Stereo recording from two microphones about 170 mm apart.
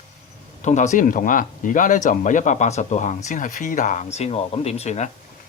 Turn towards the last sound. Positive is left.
turn(degrees=40)  # may be behind; listen again after turning